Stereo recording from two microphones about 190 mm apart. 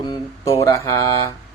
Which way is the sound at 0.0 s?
20° left (ahead or behind).